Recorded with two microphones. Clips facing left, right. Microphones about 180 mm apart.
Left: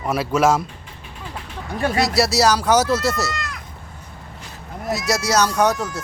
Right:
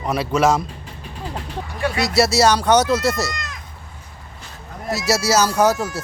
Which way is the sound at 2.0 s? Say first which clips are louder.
Right 4 dB; centre (ahead or behind).